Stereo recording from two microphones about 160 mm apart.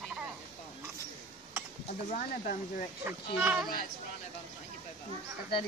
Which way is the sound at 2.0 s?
55° left (ahead or behind).